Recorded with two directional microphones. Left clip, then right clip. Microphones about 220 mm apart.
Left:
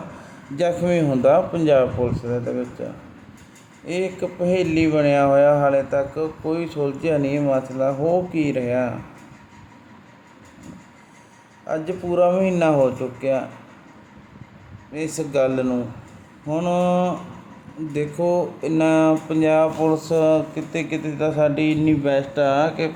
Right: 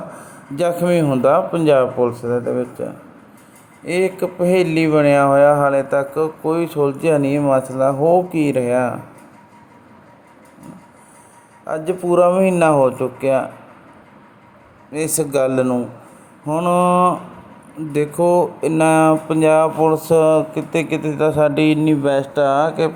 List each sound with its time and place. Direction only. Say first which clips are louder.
0.5 s a man's voice: right 3 dB; 10° right (ahead or behind)
3.8 s a man's voice: right 6 dB; 10° right (ahead or behind)
11.6 s a man's voice: right 4 dB; 15° right (ahead or behind)
14.9 s a man's voice: right 3 dB; 20° right (ahead or behind)